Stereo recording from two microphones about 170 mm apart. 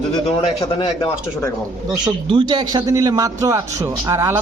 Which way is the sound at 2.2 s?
30° right (ahead or behind).